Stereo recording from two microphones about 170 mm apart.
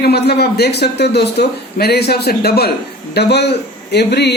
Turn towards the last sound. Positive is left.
turn(degrees=75)  # may be behind; listen again after turning